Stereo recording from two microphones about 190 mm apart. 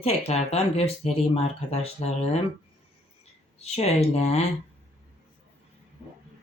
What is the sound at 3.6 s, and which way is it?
Speech, 35° left (ahead or behind).